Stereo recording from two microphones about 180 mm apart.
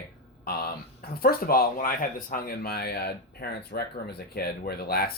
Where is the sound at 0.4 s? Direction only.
55° left (ahead or behind).